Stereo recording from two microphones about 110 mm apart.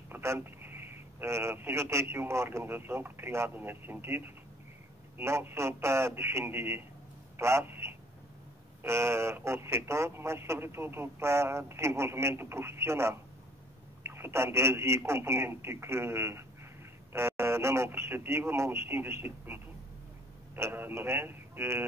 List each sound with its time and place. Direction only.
0.1 s a man's voice: 20° right (ahead or behind)